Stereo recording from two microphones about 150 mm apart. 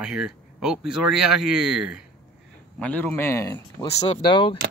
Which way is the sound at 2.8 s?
10° left (ahead or behind).